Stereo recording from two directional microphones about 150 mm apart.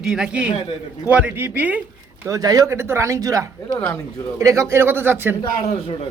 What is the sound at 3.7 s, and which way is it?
Speech, 10° left (ahead or behind).